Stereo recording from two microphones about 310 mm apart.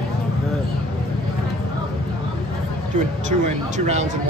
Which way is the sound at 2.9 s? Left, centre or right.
Right.